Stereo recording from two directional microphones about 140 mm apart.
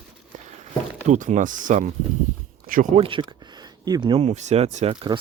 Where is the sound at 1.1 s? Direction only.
60° right (ahead or behind).